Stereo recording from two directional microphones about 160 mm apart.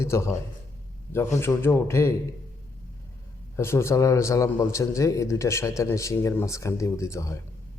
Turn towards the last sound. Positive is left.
turn(degrees=20)  # may be behind; listen again after turning